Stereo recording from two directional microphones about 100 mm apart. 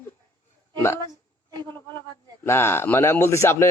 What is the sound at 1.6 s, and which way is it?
Speech, 25° left (ahead or behind).